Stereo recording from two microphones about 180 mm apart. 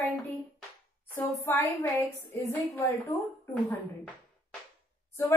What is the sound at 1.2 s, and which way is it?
A woman's voice, 15° left (ahead or behind).